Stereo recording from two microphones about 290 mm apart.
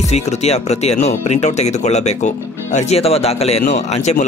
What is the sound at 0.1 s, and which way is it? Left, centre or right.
Speech, left.